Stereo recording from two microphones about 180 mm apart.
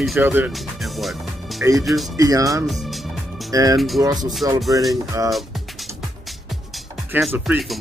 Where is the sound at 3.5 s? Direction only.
20° right (ahead or behind).